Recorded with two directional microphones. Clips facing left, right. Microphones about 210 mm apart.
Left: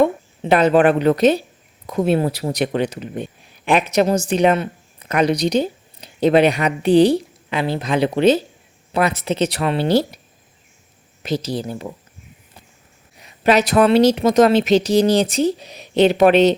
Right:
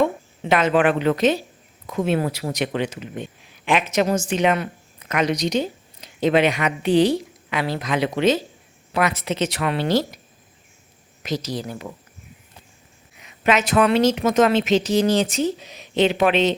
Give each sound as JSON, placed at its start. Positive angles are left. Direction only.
{"t": 0.4, "sound": "a woman's voice", "side_deg": 35}
{"t": 11.2, "sound": "speech", "side_deg": 30}
{"t": 13.1, "sound": "a woman's voice", "side_deg": 35}